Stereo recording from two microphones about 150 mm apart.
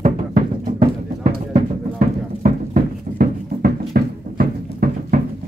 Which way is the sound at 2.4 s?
75° right (ahead or behind).